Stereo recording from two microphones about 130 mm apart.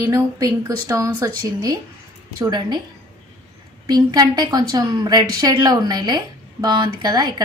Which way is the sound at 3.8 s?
30° right (ahead or behind).